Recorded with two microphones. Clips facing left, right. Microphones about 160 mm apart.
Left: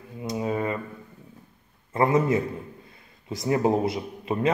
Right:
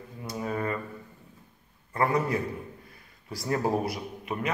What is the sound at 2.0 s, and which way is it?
A man's voice, 20° left (ahead or behind).